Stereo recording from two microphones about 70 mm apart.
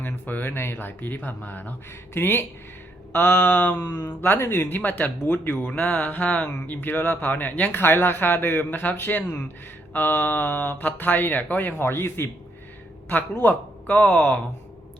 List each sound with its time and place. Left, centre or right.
0.0 s speech: left
13.1 s speech: left